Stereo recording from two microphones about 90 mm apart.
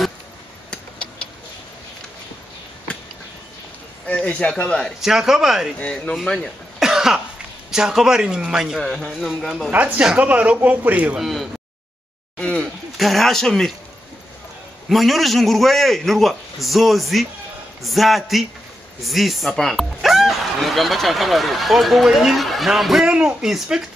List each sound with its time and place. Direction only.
4.1 s speech: 15° left (ahead or behind)
5.0 s a man's voice: 5° right (ahead or behind)
5.8 s speech: 10° left (ahead or behind)
6.8 s cough: 5° right (ahead or behind)
7.7 s a man's voice: 5° right (ahead or behind)
9.7 s a man's voice: 15° right (ahead or behind)
11.1 s speech: centre (ahead or behind)
12.4 s a sound: 10° left (ahead or behind)
12.9 s speech: centre (ahead or behind)
14.9 s a man's voice: centre (ahead or behind)